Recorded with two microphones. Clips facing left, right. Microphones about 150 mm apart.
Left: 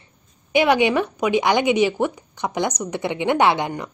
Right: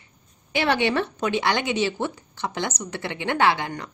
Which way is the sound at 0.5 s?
15° left (ahead or behind).